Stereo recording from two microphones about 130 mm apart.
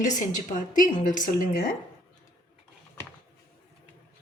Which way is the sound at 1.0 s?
90° left.